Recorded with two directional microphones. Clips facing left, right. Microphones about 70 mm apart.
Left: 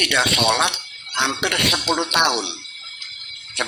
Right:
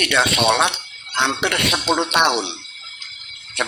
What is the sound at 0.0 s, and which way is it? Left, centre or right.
Speech, right.